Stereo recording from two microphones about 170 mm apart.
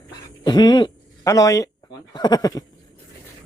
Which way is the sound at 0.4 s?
25° left (ahead or behind).